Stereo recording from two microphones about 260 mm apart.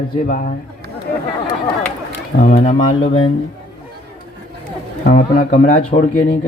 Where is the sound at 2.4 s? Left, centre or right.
Left.